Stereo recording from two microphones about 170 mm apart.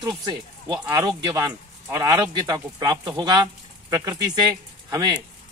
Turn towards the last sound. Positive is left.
turn(degrees=-25)  # may be behind; listen again after turning